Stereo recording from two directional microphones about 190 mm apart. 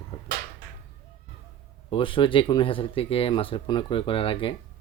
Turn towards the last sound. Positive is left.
turn(degrees=30)  # may be behind; listen again after turning